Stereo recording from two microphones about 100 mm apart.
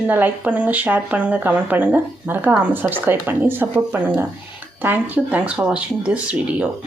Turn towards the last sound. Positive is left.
turn(degrees=-15)  # may be behind; listen again after turning